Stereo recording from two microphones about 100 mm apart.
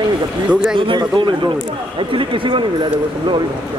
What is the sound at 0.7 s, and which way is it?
Speech, 50° right (ahead or behind).